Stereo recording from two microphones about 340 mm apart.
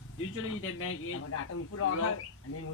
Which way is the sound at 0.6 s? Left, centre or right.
Left.